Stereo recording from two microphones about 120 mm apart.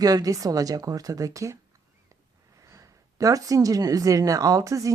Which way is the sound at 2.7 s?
25° right (ahead or behind).